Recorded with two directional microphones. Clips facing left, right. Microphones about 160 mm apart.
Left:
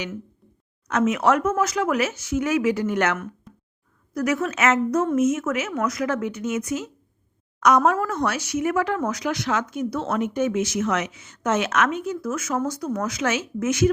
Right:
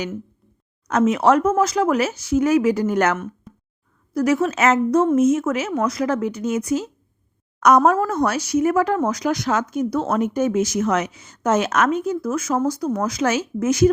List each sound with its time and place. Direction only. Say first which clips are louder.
0.9 s speech: right 4 dB; 35° right (ahead or behind)
3.5 s a sound: right 3 dB; centre (ahead or behind)
4.1 s speech: right 5 dB; 30° right (ahead or behind)